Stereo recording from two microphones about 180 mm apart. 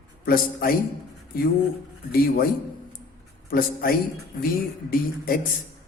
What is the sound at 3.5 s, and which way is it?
Speech, 55° left (ahead or behind).